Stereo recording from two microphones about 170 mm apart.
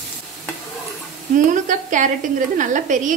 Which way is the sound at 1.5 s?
50° right (ahead or behind).